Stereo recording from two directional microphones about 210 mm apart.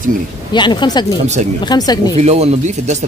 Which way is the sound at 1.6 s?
20° left (ahead or behind).